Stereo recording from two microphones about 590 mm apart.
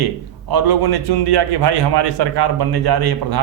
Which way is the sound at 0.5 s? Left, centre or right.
Right.